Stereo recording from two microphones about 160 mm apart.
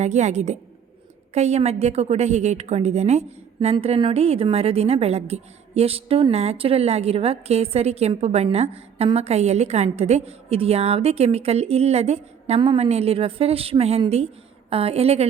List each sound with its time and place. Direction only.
0.0 s a woman's voice: 45° right (ahead or behind)